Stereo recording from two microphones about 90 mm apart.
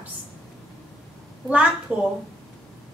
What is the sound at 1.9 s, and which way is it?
Speech, 10° right (ahead or behind).